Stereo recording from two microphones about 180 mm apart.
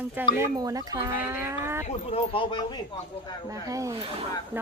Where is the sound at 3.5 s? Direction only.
20° right (ahead or behind).